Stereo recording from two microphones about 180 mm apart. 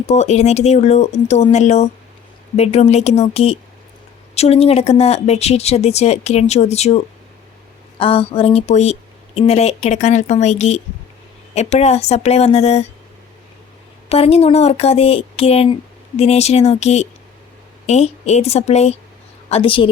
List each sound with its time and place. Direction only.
0.1 s speech: 40° left (ahead or behind)
14.1 s speech: 35° left (ahead or behind)